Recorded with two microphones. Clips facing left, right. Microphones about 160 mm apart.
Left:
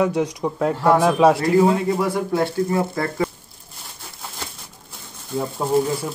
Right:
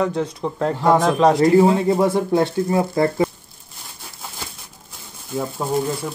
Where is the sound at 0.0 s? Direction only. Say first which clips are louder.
Left 1 dB; 10° left (ahead or behind).